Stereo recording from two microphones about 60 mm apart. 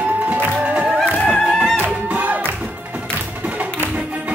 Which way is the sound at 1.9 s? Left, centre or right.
Right.